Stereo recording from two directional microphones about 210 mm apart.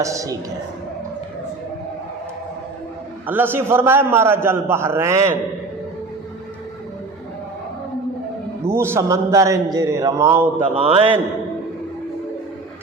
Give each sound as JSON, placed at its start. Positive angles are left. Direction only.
{"t": 0.0, "sound": "a man's voice", "side_deg": -15}
{"t": 3.2, "sound": "a man's voice", "side_deg": -10}
{"t": 8.6, "sound": "a man's voice", "side_deg": -10}
{"t": 10.8, "sound": "a man's voice", "side_deg": -25}